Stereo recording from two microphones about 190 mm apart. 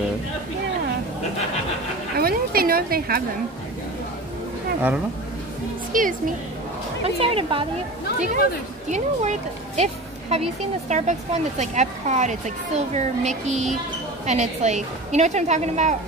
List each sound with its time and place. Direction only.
2.1 s a sound: 50° right (ahead or behind)
5.9 s a woman's voice: 45° right (ahead or behind)
7.2 s speech: 30° right (ahead or behind)
8.8 s a woman's voice: 40° right (ahead or behind)